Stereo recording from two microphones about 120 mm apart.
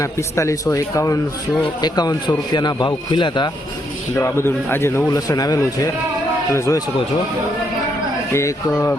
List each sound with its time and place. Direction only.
0.0 s a man's voice: 25° left (ahead or behind); by 3.5 s 40° left (ahead or behind)
4.1 s a man's voice: 20° left (ahead or behind)
8.3 s a man's voice: 25° left (ahead or behind)